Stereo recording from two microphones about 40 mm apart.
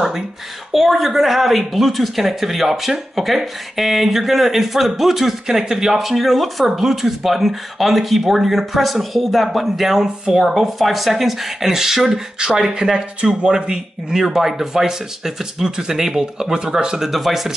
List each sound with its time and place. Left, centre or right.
0.7 s speech: centre
10.0 s speech: centre
10.5 s speech: centre
17.1 s speech: centre